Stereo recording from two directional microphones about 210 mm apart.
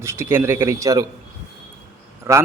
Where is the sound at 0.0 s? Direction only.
15° right (ahead or behind).